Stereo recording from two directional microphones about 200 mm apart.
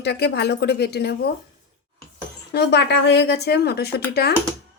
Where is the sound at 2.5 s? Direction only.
55° left (ahead or behind).